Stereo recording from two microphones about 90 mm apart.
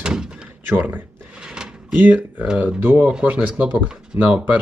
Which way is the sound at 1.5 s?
20° right (ahead or behind).